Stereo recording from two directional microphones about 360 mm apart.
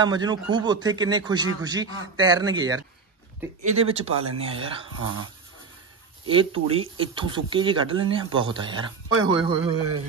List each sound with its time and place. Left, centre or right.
0.0 s speech: centre
4.1 s speech: right
4.4 s speech: centre
6.2 s speech: centre